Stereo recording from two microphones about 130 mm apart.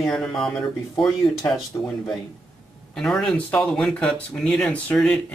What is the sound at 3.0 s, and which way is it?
Speech, 5° left (ahead or behind).